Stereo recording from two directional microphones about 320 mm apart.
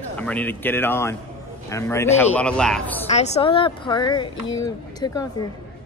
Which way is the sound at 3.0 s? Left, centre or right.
Centre.